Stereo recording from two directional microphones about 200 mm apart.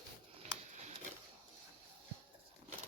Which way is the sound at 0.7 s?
35° right (ahead or behind).